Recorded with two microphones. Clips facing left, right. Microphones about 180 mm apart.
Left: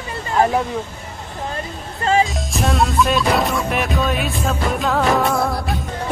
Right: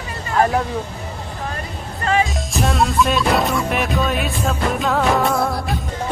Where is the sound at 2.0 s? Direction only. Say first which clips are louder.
Left 2 dB; 30° left (ahead or behind).